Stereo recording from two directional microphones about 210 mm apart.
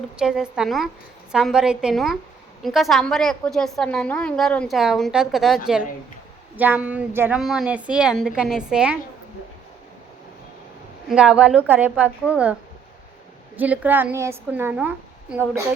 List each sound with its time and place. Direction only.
0.2 s a woman's voice: 5° right (ahead or behind)
6.6 s a woman's voice: 5° right (ahead or behind)
11.1 s a woman's voice: 5° right (ahead or behind)
13.6 s a woman's voice: 10° right (ahead or behind)